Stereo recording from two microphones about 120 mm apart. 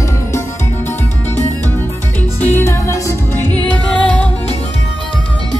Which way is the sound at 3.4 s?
10° left (ahead or behind).